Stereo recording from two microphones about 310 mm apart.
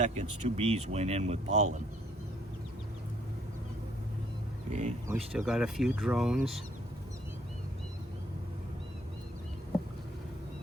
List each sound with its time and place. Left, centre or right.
0.0 s speech: right
4.7 s speech: right
5.0 s speech: centre